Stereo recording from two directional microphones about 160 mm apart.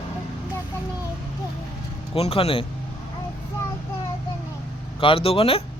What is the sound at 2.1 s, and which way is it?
Speech, 40° left (ahead or behind).